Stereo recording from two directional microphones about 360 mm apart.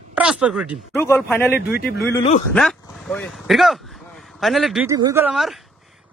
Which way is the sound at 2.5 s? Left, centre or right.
Centre.